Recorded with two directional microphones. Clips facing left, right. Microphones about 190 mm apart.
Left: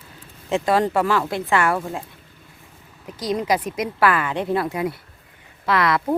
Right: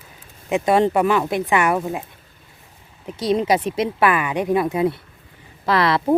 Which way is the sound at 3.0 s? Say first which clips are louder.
Right 4 dB; 25° right (ahead or behind).